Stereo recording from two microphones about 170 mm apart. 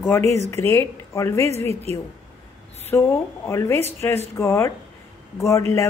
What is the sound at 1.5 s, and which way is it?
Speech, 40° right (ahead or behind).